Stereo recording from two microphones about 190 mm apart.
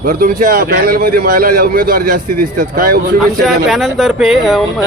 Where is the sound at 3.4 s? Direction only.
Centre (ahead or behind).